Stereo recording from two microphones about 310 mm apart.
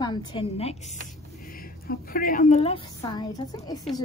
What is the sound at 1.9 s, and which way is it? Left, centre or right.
A woman's voice, left.